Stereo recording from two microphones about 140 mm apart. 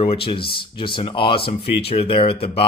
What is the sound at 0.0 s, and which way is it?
Speech, 40° left (ahead or behind).